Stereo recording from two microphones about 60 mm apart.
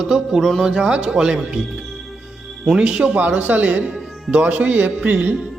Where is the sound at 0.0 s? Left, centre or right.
Centre.